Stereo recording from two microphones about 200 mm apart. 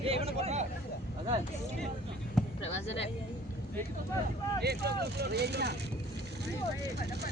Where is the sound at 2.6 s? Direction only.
30° left (ahead or behind).